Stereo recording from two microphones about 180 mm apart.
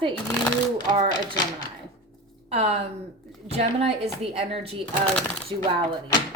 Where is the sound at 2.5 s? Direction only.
35° right (ahead or behind).